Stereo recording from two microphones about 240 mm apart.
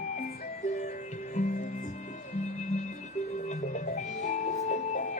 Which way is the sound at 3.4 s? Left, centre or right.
Left.